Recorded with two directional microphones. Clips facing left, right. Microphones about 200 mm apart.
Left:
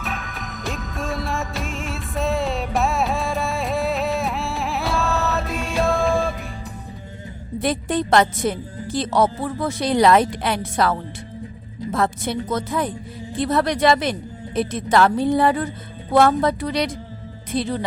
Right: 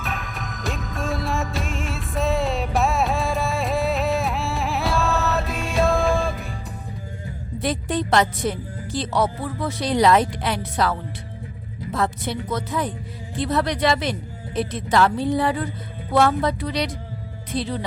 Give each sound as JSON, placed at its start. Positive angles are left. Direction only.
{"t": 0.0, "sound": "music", "side_deg": 0}
{"t": 7.6, "sound": "speech", "side_deg": 55}